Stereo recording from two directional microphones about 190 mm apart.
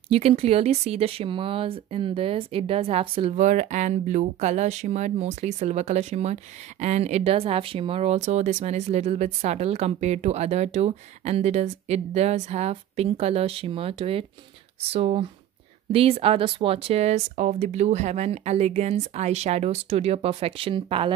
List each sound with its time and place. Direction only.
0.1 s speech: 30° right (ahead or behind)